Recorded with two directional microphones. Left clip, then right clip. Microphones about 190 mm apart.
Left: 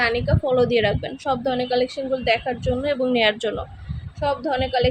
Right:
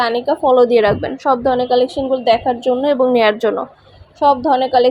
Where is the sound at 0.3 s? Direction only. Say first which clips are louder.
Right 8 dB; 20° right (ahead or behind).